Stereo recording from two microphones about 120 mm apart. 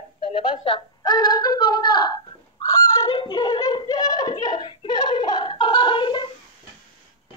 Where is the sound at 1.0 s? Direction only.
35° left (ahead or behind).